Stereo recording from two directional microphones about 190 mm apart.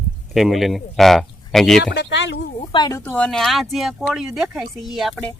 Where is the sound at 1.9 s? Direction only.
65° left (ahead or behind).